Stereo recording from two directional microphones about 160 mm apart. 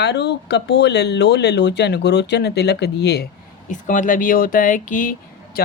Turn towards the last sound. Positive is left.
turn(degrees=55)  # may be behind; listen again after turning